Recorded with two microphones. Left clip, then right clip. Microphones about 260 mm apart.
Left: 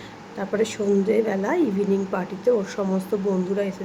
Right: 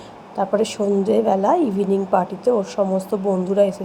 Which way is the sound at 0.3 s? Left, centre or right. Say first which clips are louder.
Right 5 dB; centre.